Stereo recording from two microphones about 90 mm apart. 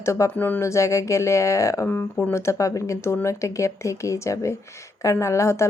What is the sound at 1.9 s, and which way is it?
Speech, 20° left (ahead or behind).